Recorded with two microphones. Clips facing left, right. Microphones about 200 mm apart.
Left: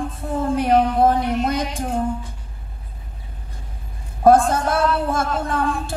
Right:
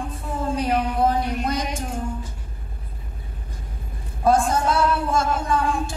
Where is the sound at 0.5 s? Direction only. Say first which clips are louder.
Left 6 dB; 55° left (ahead or behind).